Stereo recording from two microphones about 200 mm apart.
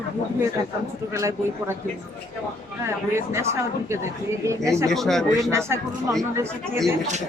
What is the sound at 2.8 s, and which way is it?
Speech, 15° right (ahead or behind).